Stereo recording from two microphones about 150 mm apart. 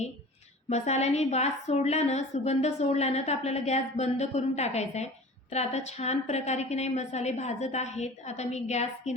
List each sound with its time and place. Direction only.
0.7 s a woman's voice: 45° left (ahead or behind)